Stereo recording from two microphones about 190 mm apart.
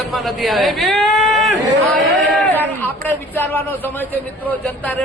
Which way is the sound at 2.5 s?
10° left (ahead or behind).